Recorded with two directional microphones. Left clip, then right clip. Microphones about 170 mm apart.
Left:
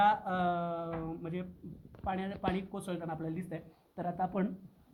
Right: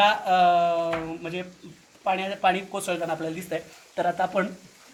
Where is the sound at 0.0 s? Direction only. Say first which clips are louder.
Right 10 dB; 15° left (ahead or behind).